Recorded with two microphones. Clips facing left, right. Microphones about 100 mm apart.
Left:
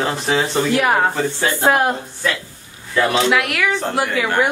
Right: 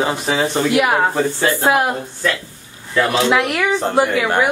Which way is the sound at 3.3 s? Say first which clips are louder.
Right 2 dB; 20° right (ahead or behind).